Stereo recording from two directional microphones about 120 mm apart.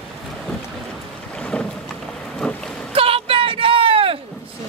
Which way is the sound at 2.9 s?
50° right (ahead or behind).